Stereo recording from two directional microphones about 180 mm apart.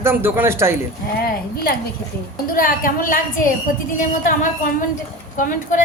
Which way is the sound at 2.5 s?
50° left (ahead or behind).